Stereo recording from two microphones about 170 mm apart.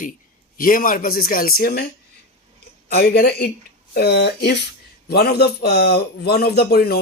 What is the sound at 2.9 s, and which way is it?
Speech, 65° left (ahead or behind).